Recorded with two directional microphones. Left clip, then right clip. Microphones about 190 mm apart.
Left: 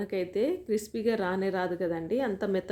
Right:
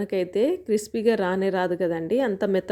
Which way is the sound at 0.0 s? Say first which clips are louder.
Right 6 dB; 40° right (ahead or behind).